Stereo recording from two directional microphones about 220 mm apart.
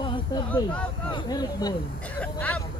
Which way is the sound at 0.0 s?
20° left (ahead or behind).